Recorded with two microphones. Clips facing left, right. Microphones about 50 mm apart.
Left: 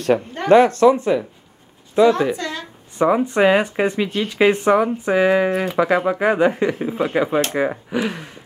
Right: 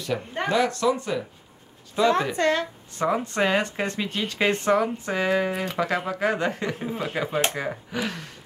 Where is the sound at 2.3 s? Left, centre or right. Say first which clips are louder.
Right 5 dB; right.